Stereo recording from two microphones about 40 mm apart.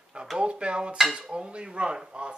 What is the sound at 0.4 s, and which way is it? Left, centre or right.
Speech, right.